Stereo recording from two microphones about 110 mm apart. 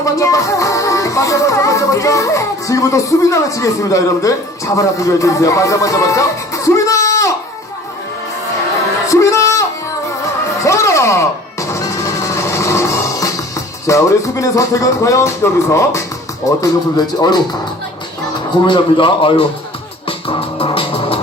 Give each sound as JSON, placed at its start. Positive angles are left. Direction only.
{"t": 0.0, "sound": "music", "side_deg": 30}
{"t": 9.0, "sound": "a sound", "side_deg": 30}
{"t": 10.7, "sound": "a sound", "side_deg": 25}
{"t": 13.8, "sound": "speech", "side_deg": 30}
{"t": 17.2, "sound": "speech", "side_deg": 40}
{"t": 18.6, "sound": "a man's voice", "side_deg": 50}
{"t": 20.1, "sound": "music", "side_deg": 55}